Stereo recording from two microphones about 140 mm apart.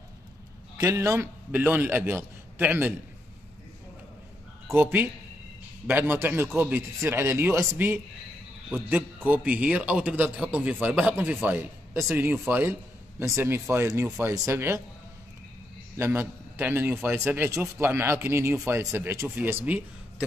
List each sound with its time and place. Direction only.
0.7 s a man's voice: 20° right (ahead or behind)
4.6 s a man's voice: 15° right (ahead or behind)
16.0 s a man's voice: 15° right (ahead or behind)